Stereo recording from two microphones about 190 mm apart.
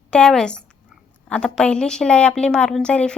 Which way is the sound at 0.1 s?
5° left (ahead or behind).